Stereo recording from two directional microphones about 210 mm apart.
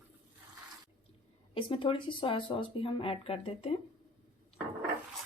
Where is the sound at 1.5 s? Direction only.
25° left (ahead or behind).